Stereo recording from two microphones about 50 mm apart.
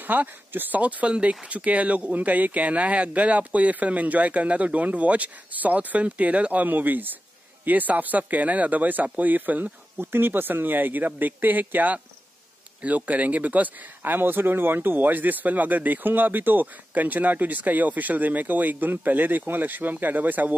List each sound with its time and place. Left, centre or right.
0.0 s speech: right
9.9 s speech: right